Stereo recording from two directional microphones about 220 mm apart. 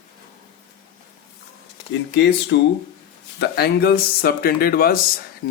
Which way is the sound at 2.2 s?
50° left (ahead or behind).